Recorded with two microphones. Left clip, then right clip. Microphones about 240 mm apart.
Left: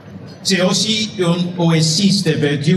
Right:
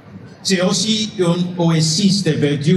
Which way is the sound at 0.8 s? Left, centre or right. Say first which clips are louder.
Even; centre.